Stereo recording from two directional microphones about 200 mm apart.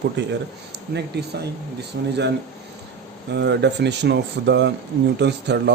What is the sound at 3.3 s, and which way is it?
Speech, 60° right (ahead or behind).